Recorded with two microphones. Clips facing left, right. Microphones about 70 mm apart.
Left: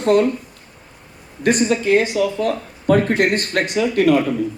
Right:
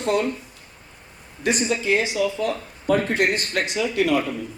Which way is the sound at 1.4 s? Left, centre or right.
Left.